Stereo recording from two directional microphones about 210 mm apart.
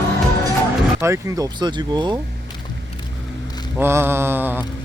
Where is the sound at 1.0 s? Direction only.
15° right (ahead or behind).